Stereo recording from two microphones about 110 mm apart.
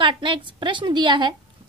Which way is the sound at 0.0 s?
45° right (ahead or behind).